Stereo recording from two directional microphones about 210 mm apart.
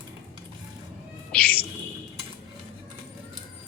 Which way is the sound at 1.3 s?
45° left (ahead or behind).